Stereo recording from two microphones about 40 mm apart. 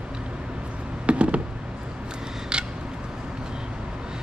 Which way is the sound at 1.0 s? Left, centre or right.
Right.